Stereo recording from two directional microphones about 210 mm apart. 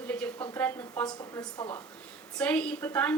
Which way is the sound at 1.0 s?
20° left (ahead or behind).